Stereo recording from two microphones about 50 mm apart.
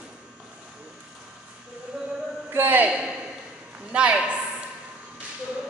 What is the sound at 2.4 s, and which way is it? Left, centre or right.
Speech, right.